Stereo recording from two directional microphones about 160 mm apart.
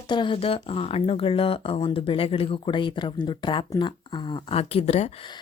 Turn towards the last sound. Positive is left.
turn(degrees=40)  # may be behind; listen again after turning